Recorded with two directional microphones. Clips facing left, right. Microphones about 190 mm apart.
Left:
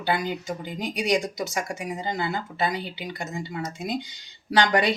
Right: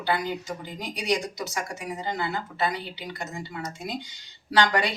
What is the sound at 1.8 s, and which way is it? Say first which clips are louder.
Speech: left 2 dB; 15° left (ahead or behind).